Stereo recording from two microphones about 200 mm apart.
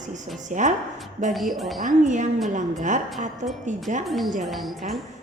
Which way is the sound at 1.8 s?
40° right (ahead or behind).